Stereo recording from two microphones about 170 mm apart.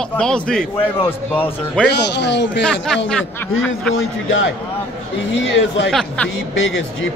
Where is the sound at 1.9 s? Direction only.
90° left.